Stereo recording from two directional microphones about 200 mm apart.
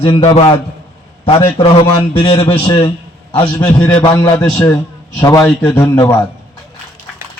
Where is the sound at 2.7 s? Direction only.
25° left (ahead or behind).